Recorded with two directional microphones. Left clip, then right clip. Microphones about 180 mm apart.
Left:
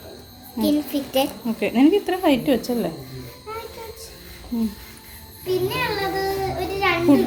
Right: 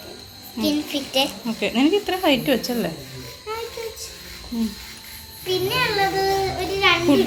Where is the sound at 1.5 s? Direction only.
20° left (ahead or behind).